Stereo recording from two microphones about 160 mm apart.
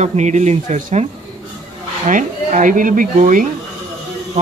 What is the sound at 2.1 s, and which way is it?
Speech, 50° right (ahead or behind).